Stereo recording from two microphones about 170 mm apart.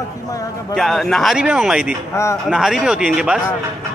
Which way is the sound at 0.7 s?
Centre (ahead or behind).